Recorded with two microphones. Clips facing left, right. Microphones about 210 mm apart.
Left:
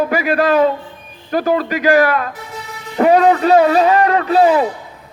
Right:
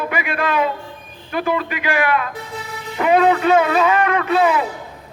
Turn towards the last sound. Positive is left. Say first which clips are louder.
# left 4 dB
turn(degrees=35)  # may be behind; listen again after turning